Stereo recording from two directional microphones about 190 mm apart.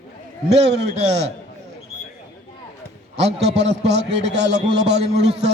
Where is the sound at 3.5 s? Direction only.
65° right (ahead or behind).